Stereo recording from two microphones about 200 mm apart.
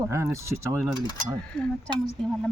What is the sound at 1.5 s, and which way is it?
Speech, 5° left (ahead or behind).